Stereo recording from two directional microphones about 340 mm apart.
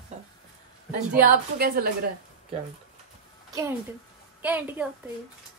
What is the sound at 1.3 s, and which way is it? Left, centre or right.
A woman's voice, right.